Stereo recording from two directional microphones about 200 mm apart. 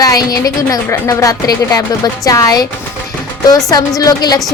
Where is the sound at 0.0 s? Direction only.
20° left (ahead or behind).